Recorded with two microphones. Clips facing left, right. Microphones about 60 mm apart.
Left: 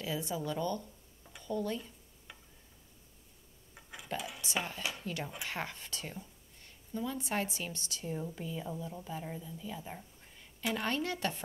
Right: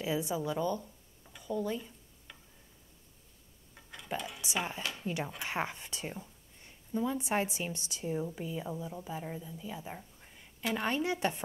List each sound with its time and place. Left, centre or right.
0.0 s a woman's voice: centre
3.7 s a sound: centre
4.4 s a woman's voice: centre